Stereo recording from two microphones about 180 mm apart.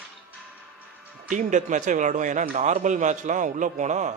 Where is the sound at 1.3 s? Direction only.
45° right (ahead or behind).